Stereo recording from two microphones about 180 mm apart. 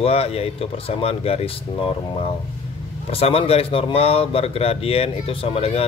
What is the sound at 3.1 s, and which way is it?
Speech, 35° left (ahead or behind).